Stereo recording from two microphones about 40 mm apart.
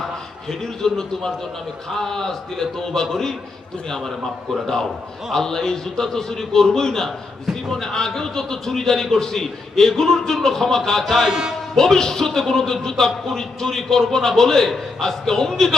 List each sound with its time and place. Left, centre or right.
0.6 s a man's voice: centre
11.0 s speech: centre
11.3 s a man's voice: centre
11.7 s a man's voice: centre